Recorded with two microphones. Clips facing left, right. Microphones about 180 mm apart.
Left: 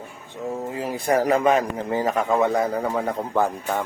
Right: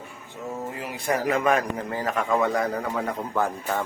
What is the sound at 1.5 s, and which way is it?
Speech, 20° left (ahead or behind).